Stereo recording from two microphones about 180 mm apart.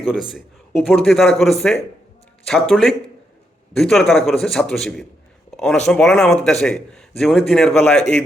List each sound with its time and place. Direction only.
0.0 s speech: 5° right (ahead or behind)